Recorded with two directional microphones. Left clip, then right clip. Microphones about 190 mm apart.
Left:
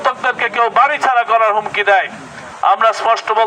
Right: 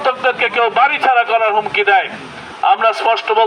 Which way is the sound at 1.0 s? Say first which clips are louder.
Even; 15° left (ahead or behind).